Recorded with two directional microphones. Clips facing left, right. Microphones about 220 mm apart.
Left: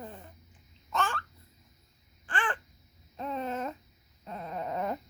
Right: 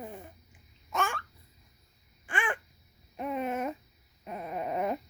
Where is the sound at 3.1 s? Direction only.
15° right (ahead or behind).